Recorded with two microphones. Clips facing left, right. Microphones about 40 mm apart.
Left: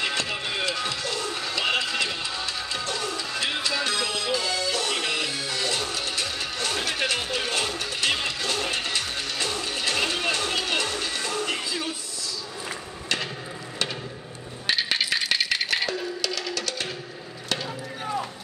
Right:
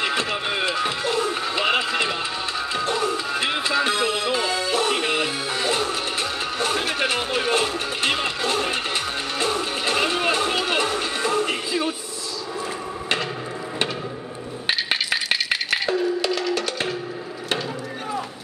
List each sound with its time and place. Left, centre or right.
0.0 s music: centre
14.7 s coin: centre
15.5 s busy signal: centre
16.5 s music: right